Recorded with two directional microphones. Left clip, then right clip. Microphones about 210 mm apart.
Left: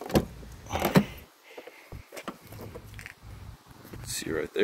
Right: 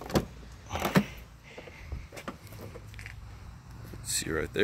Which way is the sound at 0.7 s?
30° left (ahead or behind).